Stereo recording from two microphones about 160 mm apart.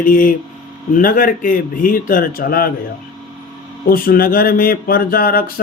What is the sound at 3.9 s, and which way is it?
Speech, 65° left (ahead or behind).